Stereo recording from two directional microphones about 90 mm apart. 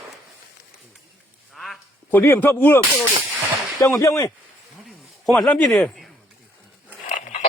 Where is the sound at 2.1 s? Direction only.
25° left (ahead or behind).